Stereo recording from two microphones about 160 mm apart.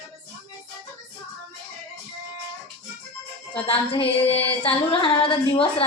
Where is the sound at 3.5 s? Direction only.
35° left (ahead or behind).